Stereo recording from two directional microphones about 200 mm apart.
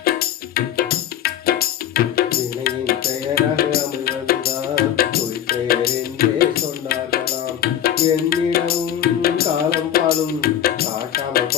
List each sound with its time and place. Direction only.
0.0 s music: 50° left (ahead or behind)